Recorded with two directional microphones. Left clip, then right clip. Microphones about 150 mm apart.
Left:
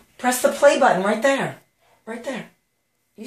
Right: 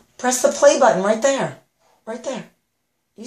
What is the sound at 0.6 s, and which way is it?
Speech, 15° right (ahead or behind).